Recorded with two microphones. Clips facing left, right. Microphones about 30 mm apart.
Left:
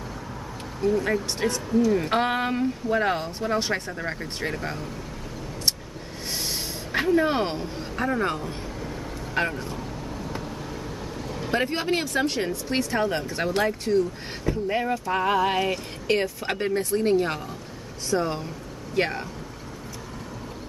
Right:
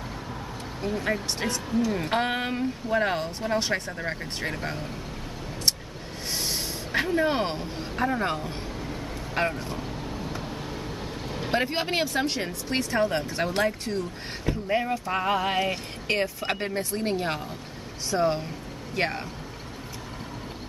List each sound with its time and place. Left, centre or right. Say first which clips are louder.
0.7 s speech: left 5 dB; centre
6.3 s a sound: even; centre
8.8 s vehicle: left 1 dB; centre
11.6 s speech: left 1 dB; centre
12.4 s speech: left 3 dB; centre